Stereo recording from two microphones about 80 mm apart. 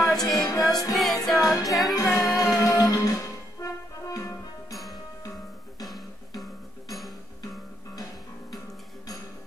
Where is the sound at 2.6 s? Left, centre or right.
Left.